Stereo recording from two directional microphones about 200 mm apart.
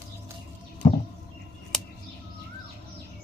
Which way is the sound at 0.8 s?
35° left (ahead or behind).